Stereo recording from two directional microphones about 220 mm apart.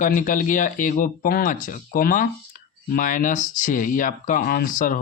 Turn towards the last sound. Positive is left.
turn(degrees=40)  # may be behind; listen again after turning